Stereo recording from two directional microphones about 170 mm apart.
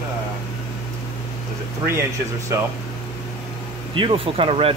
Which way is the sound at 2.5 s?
15° right (ahead or behind).